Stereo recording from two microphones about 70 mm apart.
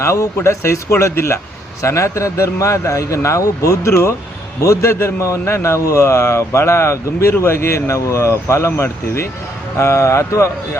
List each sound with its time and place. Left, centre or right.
0.0 s a man's voice: left